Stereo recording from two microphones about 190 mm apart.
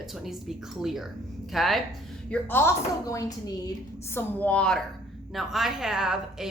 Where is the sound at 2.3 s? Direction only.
10° left (ahead or behind).